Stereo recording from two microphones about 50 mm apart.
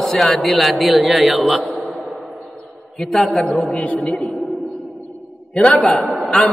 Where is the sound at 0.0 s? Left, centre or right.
Centre.